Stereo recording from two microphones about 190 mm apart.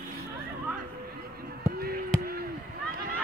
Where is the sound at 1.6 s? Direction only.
55° right (ahead or behind).